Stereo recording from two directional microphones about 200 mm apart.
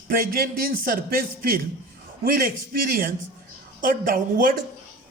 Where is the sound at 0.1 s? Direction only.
45° right (ahead or behind).